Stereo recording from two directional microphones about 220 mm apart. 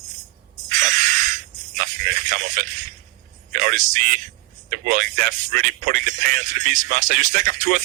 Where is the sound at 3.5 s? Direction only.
35° right (ahead or behind).